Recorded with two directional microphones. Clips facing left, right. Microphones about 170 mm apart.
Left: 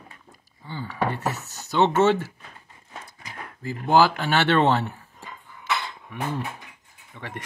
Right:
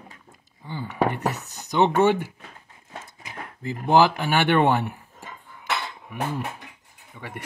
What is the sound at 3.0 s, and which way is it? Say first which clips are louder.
Horse: right 1 dB; 20° right (ahead or behind).